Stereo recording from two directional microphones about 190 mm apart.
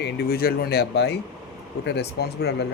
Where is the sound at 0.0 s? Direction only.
55° left (ahead or behind).